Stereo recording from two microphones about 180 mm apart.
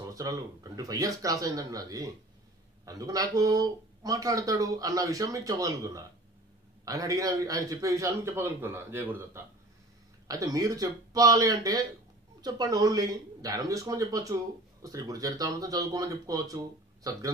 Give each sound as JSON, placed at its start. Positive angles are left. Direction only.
{"t": 0.0, "sound": "a man's voice", "side_deg": -20}